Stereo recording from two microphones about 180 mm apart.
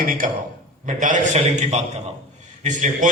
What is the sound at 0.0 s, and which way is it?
A man's voice, 50° right (ahead or behind).